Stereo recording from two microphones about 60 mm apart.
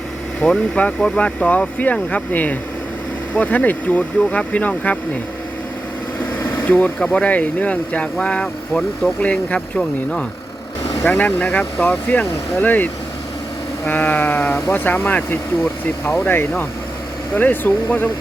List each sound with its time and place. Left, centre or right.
0.4 s speech: left
6.6 s speech: left
7.0 s speech: centre
11.1 s speech: left